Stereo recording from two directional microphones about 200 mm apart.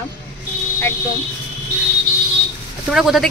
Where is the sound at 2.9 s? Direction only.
Centre (ahead or behind).